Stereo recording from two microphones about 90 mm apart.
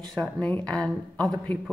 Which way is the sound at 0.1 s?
5° left (ahead or behind).